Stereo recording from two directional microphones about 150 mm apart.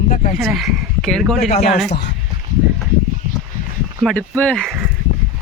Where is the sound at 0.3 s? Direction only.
Centre (ahead or behind).